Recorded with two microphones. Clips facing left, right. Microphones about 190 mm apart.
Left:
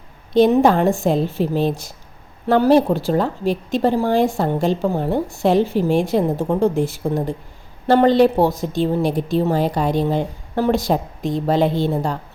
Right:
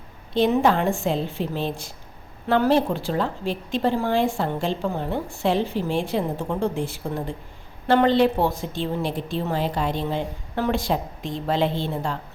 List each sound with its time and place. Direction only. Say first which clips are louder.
0.3 s a woman's voice: left 6 dB; 40° left (ahead or behind)